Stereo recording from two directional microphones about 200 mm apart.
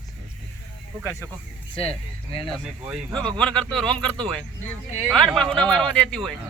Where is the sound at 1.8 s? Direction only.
30° left (ahead or behind).